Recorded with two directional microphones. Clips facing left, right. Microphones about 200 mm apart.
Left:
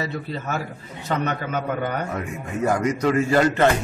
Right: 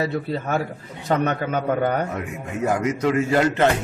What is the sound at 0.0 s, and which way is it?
A man's voice, 55° right (ahead or behind).